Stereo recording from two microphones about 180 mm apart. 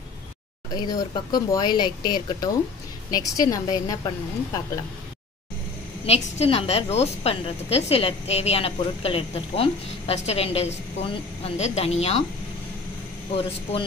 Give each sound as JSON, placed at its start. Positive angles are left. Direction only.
{"t": 0.7, "sound": "speech", "side_deg": 25}
{"t": 6.0, "sound": "a woman's voice", "side_deg": 35}
{"t": 13.4, "sound": "a woman's voice", "side_deg": 30}